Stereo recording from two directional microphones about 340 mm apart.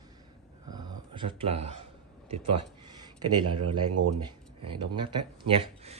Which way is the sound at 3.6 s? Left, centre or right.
Right.